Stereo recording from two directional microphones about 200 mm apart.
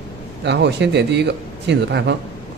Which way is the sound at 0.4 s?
60° right (ahead or behind).